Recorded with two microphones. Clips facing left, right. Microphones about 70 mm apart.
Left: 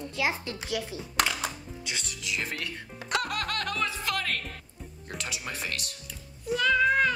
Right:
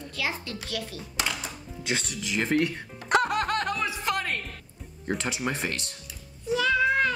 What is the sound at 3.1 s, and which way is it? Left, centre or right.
Music, right.